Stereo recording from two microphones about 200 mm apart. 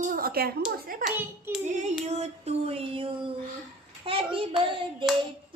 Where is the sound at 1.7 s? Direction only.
35° right (ahead or behind).